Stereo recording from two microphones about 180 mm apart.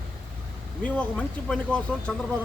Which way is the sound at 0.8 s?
10° left (ahead or behind).